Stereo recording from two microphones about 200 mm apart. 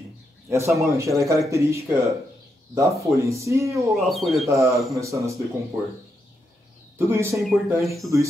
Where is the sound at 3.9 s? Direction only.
Centre (ahead or behind).